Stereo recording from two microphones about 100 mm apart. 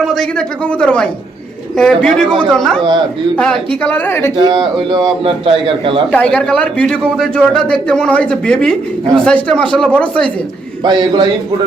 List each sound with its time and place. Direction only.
0.0 s a man's voice: 5° left (ahead or behind)
3.8 s a woman's voice: 20° left (ahead or behind)
4.4 s a man's voice: 45° right (ahead or behind)
5.2 s a man's voice: 65° right (ahead or behind)
6.1 s a man's voice: 10° left (ahead or behind)
10.8 s a man's voice: 45° right (ahead or behind)